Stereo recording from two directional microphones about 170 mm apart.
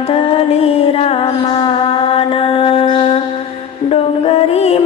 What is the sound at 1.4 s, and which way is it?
Mantra, 30° left (ahead or behind).